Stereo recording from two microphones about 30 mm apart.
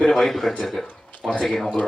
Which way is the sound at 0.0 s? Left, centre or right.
Centre.